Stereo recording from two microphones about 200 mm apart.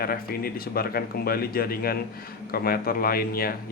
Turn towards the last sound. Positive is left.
turn(degrees=50)  # may be behind; listen again after turning